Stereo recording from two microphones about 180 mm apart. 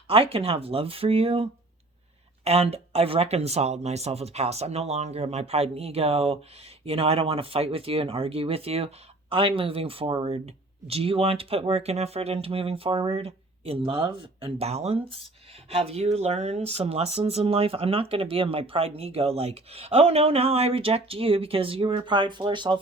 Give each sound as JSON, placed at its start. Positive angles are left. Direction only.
{"t": 0.1, "sound": "speech", "side_deg": -30}